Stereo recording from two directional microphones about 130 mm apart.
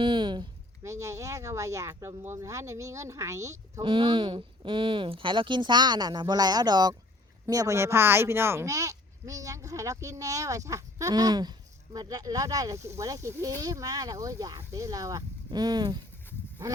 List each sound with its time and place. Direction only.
0.0 s a sound: 40° right (ahead or behind)
0.9 s speech: 25° right (ahead or behind)
3.8 s speech: 40° right (ahead or behind)